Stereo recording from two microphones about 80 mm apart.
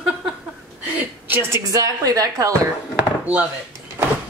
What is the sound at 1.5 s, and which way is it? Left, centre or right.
A woman's voice, right.